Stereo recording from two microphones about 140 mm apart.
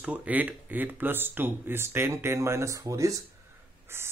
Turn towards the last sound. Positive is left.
turn(degrees=-15)  # may be behind; listen again after turning